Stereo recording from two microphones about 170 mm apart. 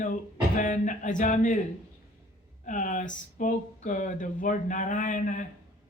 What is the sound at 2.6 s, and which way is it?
Speech, 50° left (ahead or behind).